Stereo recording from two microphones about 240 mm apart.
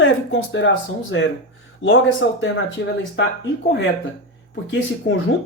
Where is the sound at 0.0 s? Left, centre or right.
Left.